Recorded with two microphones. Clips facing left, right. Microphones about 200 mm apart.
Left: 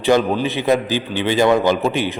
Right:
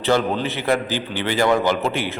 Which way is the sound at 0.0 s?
15° left (ahead or behind).